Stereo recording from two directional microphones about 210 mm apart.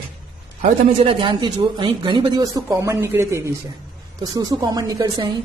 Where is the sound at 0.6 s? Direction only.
30° right (ahead or behind).